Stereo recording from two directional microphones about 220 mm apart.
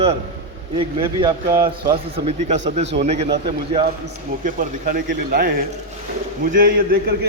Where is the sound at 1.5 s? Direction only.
40° right (ahead or behind).